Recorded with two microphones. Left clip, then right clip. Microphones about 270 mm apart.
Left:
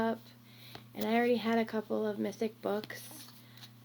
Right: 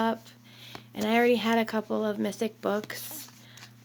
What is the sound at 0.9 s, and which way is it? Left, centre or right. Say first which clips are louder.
Speech: right 6 dB; right.